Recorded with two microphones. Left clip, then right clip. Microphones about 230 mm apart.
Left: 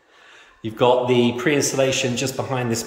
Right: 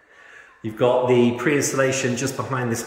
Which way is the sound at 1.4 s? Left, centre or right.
Centre.